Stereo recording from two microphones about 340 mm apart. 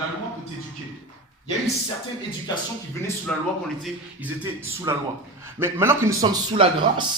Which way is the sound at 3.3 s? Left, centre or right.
Centre.